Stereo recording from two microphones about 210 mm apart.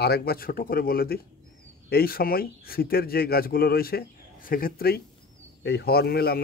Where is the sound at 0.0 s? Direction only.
45° left (ahead or behind).